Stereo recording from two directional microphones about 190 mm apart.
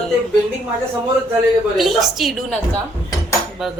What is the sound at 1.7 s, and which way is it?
Speech, centre (ahead or behind).